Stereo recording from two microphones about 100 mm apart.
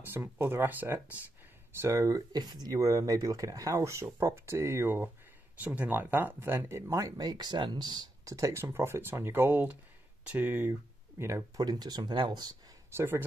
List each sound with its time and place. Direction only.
0.0 s speech: 20° right (ahead or behind)
1.8 s speech: 30° right (ahead or behind)
11.6 s speech: 45° right (ahead or behind)
12.9 s speech: 25° right (ahead or behind)